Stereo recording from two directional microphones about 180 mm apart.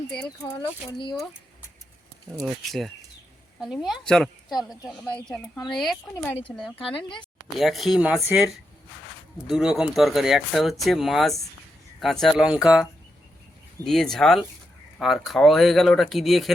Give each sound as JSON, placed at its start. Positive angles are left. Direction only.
{"t": 0.4, "sound": "speech", "side_deg": 15}
{"t": 3.6, "sound": "speech", "side_deg": 0}
{"t": 7.6, "sound": "speech", "side_deg": 0}
{"t": 9.5, "sound": "speech", "side_deg": 0}